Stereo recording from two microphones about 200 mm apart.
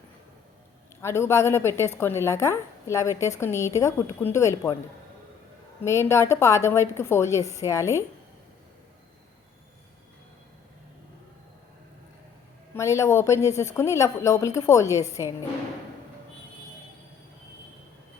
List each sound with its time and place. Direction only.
1.0 s a woman's voice: 15° left (ahead or behind)
5.8 s a woman's voice: 15° left (ahead or behind)
12.7 s a woman's voice: 15° left (ahead or behind)